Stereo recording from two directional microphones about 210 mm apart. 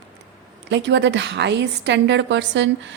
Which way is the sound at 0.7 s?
55° right (ahead or behind).